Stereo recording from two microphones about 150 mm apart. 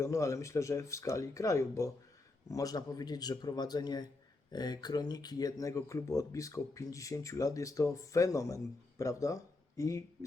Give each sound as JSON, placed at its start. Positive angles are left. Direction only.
{"t": 0.0, "sound": "speech", "side_deg": 20}